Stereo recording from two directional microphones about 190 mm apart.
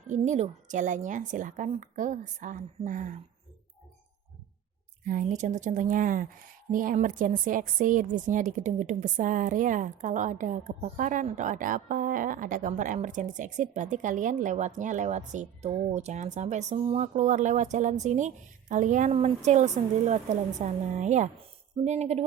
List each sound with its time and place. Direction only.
0.1 s speech: 35° right (ahead or behind)
5.0 s speech: 40° right (ahead or behind)